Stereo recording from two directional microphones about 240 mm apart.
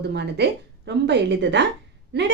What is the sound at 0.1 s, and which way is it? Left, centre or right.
Speech, right.